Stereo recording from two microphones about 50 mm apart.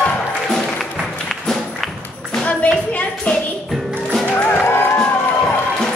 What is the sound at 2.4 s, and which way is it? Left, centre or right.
Clapping, left.